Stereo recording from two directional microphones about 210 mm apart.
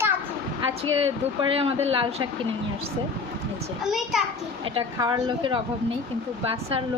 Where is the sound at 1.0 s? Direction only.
25° right (ahead or behind).